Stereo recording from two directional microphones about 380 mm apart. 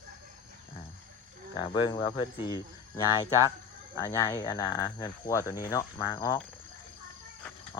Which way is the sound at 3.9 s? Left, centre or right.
Centre.